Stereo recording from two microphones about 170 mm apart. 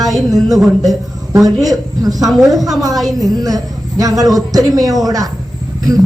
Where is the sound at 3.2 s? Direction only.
20° right (ahead or behind).